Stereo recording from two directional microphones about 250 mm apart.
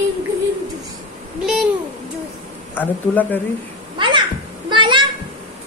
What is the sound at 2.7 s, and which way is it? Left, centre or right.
Speech, centre.